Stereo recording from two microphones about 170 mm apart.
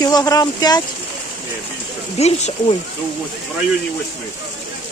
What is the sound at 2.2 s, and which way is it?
Speech, 40° left (ahead or behind).